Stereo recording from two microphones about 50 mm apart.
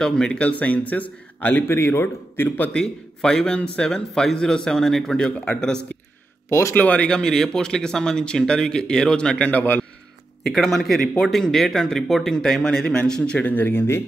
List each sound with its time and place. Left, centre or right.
0.0 s speech: centre
0.4 s speech: left
1.8 s a man's voice: left
2.7 s speech: centre
6.7 s speech: left
7.1 s speech: centre
9.5 s speech: left
10.4 s speech: centre
12.6 s a man's voice: centre
13.4 s speech: left